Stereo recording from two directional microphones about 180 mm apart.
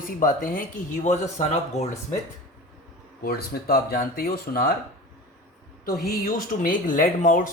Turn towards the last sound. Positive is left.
turn(degrees=50)  # may be behind; listen again after turning